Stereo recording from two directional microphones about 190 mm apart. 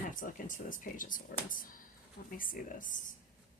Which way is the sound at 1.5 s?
45° left (ahead or behind).